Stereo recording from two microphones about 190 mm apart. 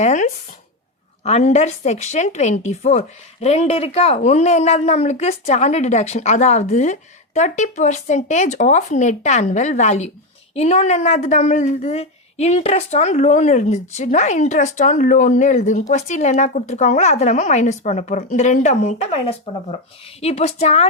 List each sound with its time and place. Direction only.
0.0 s a woman's voice: 40° left (ahead or behind)